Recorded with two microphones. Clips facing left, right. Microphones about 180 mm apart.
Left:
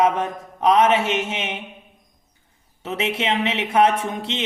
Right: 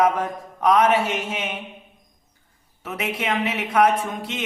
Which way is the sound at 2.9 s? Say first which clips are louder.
Left 3 dB; 25° left (ahead or behind).